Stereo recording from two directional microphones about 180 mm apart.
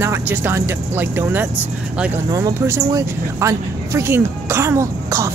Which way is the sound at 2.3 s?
20° right (ahead or behind).